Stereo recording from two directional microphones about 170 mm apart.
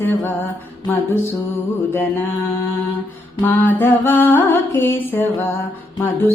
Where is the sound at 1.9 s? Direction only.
15° left (ahead or behind).